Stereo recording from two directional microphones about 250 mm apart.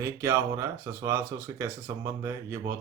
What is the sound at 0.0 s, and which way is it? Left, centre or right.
Speech, centre.